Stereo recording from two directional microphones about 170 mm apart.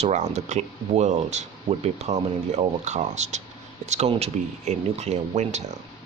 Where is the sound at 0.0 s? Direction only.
45° right (ahead or behind).